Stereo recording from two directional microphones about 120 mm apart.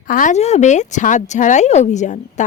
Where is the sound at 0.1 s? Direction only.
90° left.